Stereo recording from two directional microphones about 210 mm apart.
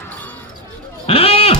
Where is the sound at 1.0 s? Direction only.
25° left (ahead or behind).